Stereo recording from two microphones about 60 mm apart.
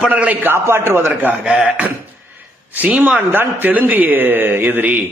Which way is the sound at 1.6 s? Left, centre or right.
Right.